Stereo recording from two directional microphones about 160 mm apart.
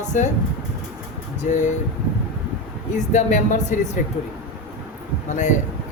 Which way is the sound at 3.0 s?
50° left (ahead or behind).